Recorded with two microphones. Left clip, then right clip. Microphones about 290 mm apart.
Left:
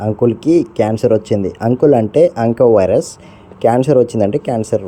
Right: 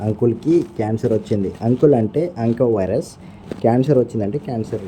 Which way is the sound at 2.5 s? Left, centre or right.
Left.